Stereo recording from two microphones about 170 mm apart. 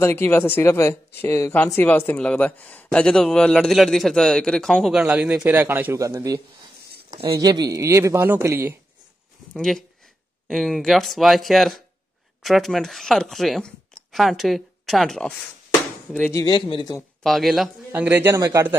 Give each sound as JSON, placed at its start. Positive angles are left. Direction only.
{"t": 0.0, "sound": "a man's voice", "side_deg": 15}
{"t": 7.1, "sound": "a sound", "side_deg": -30}
{"t": 7.3, "sound": "a man's voice", "side_deg": -20}
{"t": 9.5, "sound": "a man's voice", "side_deg": 0}
{"t": 16.4, "sound": "speech", "side_deg": 30}
{"t": 17.2, "sound": "a man's voice", "side_deg": 0}